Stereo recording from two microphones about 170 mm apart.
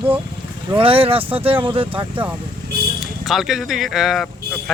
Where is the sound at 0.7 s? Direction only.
35° right (ahead or behind).